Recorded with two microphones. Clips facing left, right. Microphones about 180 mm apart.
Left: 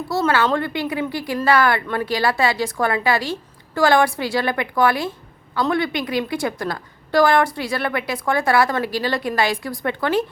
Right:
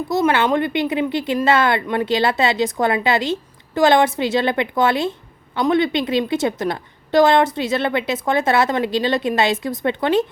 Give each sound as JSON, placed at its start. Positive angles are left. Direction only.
{"t": 0.1, "sound": "a woman's voice", "side_deg": -15}